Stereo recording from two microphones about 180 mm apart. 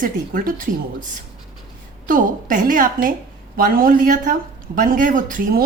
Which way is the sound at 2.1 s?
45° right (ahead or behind).